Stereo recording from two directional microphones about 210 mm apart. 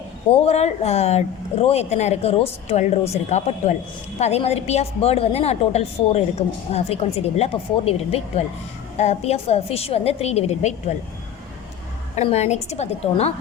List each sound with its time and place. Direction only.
0.3 s a woman's voice: 30° left (ahead or behind)
12.1 s speech: 30° left (ahead or behind)